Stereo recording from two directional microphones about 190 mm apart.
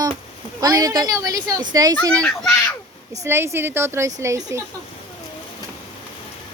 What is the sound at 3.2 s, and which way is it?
A woman's voice, 15° right (ahead or behind).